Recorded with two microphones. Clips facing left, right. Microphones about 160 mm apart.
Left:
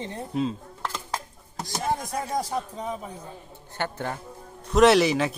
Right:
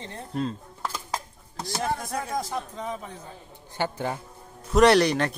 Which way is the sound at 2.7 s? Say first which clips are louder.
Left 1 dB; 5° left (ahead or behind).